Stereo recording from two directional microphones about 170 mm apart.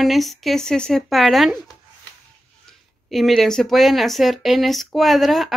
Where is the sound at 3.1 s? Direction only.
Centre (ahead or behind).